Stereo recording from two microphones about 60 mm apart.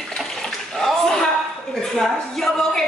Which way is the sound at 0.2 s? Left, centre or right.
Centre.